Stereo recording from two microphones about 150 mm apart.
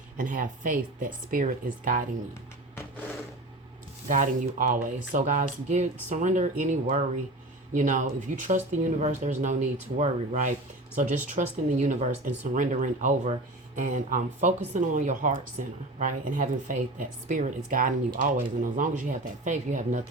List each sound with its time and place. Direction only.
0.2 s speech: 65° right (ahead or behind)
4.1 s speech: 60° right (ahead or behind)